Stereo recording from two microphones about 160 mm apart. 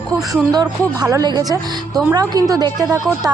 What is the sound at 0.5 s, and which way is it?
A woman's voice, 25° right (ahead or behind).